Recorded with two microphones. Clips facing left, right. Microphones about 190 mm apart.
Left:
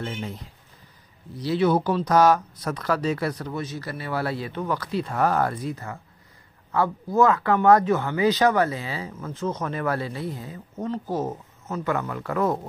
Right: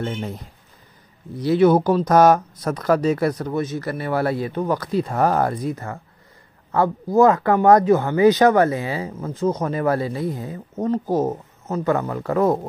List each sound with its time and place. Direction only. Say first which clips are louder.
0.0 s speech: right 5 dB; 45° right (ahead or behind)
1.4 s speech: right 6 dB; 50° right (ahead or behind)